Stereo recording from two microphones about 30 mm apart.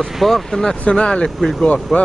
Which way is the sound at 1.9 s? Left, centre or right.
Centre.